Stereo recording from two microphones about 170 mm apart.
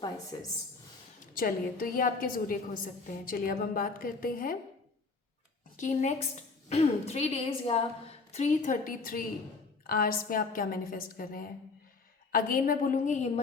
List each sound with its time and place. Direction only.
0.3 s a woman's voice: 20° left (ahead or behind)
1.3 s a woman's voice: 55° left (ahead or behind)
5.7 s a woman's voice: 45° left (ahead or behind)